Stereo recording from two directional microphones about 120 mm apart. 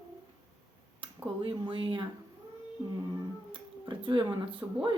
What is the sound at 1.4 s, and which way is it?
Speech, 45° right (ahead or behind).